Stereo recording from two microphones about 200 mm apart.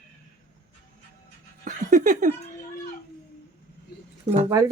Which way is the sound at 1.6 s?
40° right (ahead or behind).